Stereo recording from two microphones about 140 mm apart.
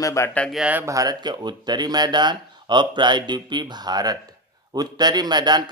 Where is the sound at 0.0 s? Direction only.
20° left (ahead or behind).